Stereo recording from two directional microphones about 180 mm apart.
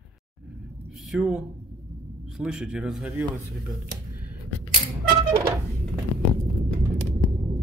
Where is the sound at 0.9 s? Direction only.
Centre (ahead or behind).